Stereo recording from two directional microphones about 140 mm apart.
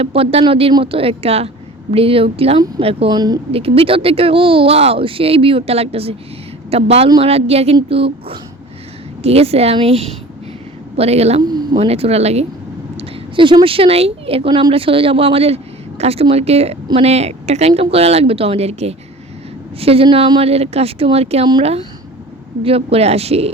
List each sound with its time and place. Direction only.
0.0 s speech: 45° right (ahead or behind)
3.1 s speech: 30° right (ahead or behind)
3.5 s a woman's voice: 45° right (ahead or behind)
11.4 s a sound: 30° right (ahead or behind)
11.8 s speech: 45° right (ahead or behind)
13.0 s speech: 35° right (ahead or behind)